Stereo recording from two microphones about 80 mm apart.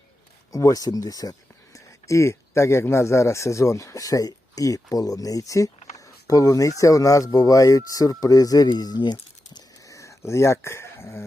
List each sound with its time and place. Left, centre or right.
0.5 s speech: left
9.9 s dog: left